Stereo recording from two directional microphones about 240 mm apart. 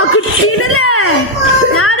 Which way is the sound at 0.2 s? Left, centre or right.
Left.